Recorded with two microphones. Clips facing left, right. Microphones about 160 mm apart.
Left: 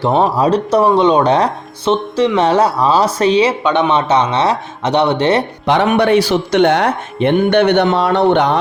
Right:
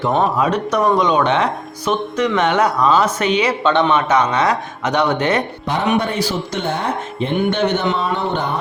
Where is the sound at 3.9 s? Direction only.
30° left (ahead or behind).